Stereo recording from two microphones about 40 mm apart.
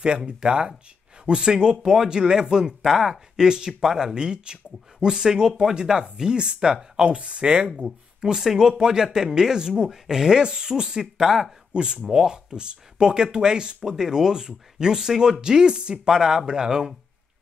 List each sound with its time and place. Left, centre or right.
0.2 s speech: right
11.7 s chopping: right
12.1 s speech: centre
16.2 s speech: centre